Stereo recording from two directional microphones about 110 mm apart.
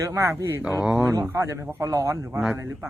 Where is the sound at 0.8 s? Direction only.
5° right (ahead or behind).